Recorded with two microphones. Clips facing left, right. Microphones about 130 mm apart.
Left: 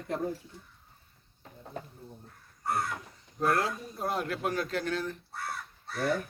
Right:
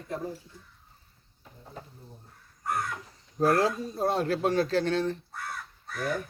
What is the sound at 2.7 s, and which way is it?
Crow, 30° left (ahead or behind).